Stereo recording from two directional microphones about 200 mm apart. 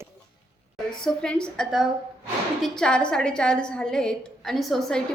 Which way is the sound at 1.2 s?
5° left (ahead or behind).